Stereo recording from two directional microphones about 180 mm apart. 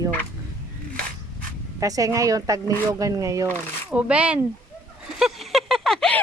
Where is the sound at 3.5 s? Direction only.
5° right (ahead or behind).